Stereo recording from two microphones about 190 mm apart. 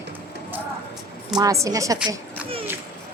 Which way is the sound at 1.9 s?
5° right (ahead or behind).